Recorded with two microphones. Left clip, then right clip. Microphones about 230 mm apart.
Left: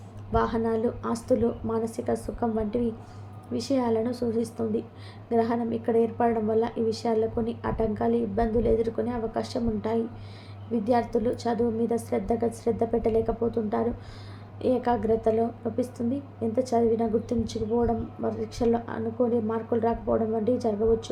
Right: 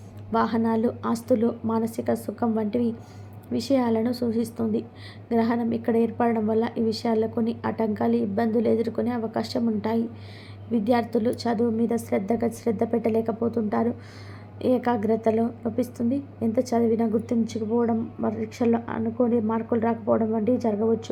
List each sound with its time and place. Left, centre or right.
0.3 s a woman's voice: right